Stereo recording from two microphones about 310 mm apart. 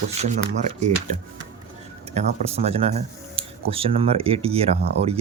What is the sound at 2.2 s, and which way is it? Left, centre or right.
Speech, centre.